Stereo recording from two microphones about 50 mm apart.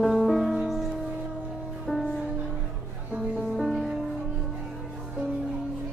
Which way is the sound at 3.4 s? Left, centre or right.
Centre.